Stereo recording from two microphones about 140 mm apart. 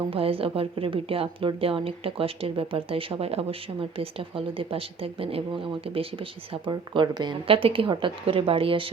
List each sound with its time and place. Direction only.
0.0 s a woman's voice: 40° right (ahead or behind)